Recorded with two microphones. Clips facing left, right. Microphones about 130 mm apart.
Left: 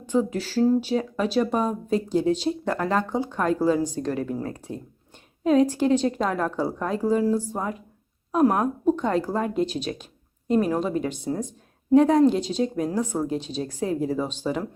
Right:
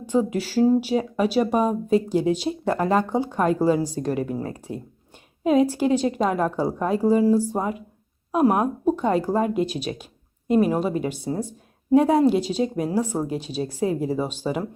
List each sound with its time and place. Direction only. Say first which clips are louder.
0.0 s a woman's voice: right 2 dB; 10° right (ahead or behind)